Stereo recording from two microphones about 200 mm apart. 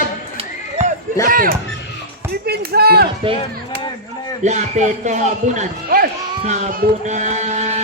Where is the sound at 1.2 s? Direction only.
45° right (ahead or behind).